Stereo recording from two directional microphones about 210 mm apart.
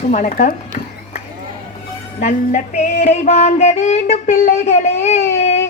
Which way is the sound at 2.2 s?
35° left (ahead or behind).